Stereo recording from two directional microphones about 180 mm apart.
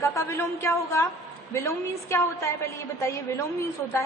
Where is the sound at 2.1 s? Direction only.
15° left (ahead or behind).